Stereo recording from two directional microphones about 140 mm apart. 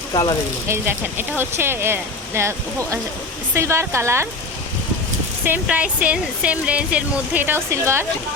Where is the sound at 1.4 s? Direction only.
15° right (ahead or behind).